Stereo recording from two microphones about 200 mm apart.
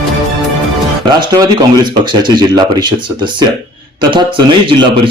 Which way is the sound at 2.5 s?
20° right (ahead or behind).